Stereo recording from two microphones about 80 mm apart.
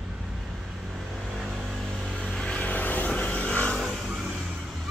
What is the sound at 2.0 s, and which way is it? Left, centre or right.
Vehicle, centre.